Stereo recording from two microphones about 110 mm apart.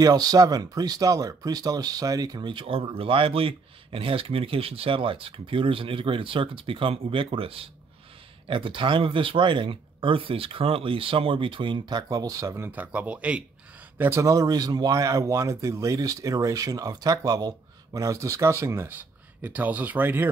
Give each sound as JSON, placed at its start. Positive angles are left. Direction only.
{"t": 0.0, "sound": "speech", "side_deg": -35}
{"t": 13.9, "sound": "speech", "side_deg": -20}